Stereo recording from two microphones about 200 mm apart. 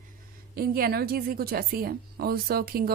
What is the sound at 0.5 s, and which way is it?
A woman's voice, 50° right (ahead or behind).